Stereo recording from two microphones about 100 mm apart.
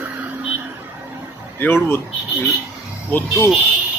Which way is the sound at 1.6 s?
20° left (ahead or behind).